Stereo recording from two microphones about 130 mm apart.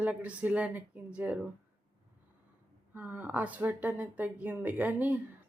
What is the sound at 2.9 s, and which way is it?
A woman's voice, 10° right (ahead or behind).